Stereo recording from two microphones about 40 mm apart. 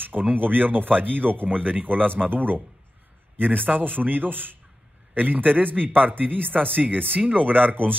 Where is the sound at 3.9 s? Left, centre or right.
Right.